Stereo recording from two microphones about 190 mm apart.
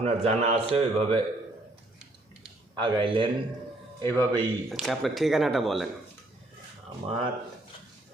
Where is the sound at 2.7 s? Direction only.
25° right (ahead or behind).